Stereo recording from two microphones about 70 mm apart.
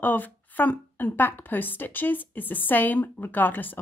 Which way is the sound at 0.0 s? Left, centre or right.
Left.